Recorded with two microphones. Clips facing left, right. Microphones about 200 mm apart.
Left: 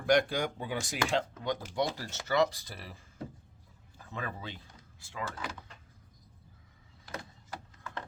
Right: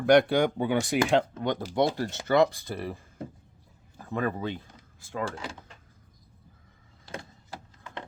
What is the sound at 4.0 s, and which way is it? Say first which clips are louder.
Speech: right 11 dB; 50° right (ahead or behind).